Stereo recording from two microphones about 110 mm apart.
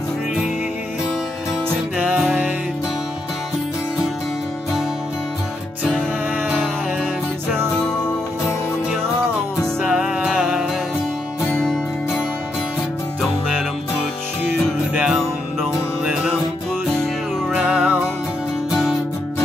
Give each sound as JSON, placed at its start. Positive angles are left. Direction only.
{"t": 2.0, "sound": "music", "side_deg": -10}
{"t": 9.8, "sound": "music", "side_deg": -10}
{"t": 11.5, "sound": "music", "side_deg": 15}
{"t": 15.0, "sound": "music", "side_deg": -5}
{"t": 17.5, "sound": "music", "side_deg": -10}